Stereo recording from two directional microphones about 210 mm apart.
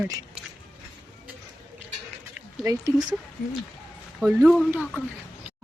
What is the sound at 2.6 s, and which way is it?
Speech, 15° right (ahead or behind).